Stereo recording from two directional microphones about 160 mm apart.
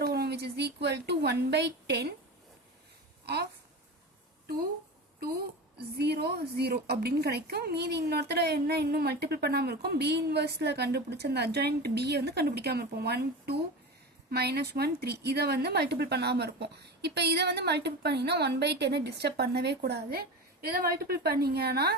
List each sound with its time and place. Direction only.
0.0 s a woman's voice: 85° right
3.2 s speech: 90° right
5.7 s speech: 90° right